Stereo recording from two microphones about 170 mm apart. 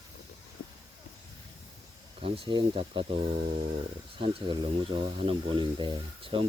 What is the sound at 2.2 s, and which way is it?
Speech, 35° right (ahead or behind).